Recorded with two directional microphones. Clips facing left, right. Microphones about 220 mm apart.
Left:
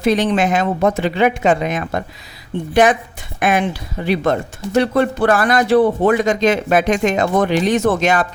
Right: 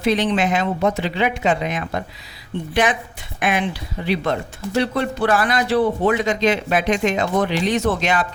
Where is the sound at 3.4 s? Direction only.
45° left (ahead or behind).